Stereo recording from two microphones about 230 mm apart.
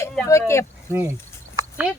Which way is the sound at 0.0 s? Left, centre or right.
Centre.